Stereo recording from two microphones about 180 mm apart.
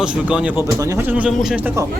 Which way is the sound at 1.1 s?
5° right (ahead or behind).